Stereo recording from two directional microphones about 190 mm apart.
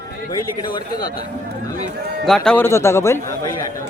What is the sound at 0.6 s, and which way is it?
Speech, 20° left (ahead or behind).